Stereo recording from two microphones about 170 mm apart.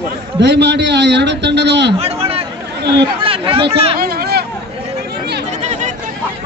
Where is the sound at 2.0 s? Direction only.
35° right (ahead or behind).